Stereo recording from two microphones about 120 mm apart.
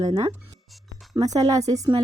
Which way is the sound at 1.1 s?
30° right (ahead or behind).